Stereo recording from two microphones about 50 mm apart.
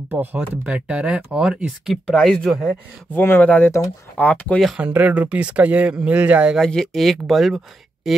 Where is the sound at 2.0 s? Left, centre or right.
Centre.